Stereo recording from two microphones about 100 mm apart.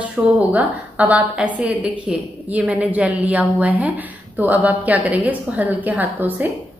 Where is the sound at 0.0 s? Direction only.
15° right (ahead or behind).